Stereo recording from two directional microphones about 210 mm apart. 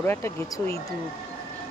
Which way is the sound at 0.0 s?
10° left (ahead or behind).